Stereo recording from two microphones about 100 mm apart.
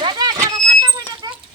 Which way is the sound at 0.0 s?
45° right (ahead or behind).